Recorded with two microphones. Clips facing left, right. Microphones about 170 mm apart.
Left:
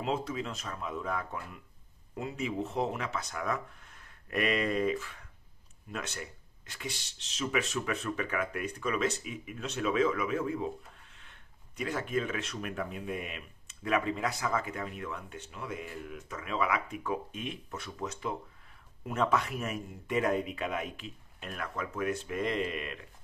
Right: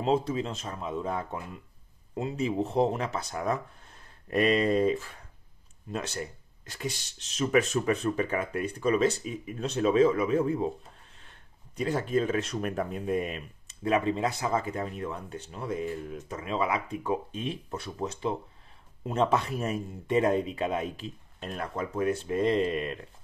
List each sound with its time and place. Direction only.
0.0 s speech: 30° right (ahead or behind)